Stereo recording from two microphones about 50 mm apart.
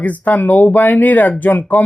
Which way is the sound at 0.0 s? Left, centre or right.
Left.